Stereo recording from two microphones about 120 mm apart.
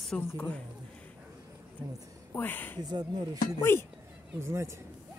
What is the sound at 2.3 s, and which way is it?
Speech, 15° left (ahead or behind).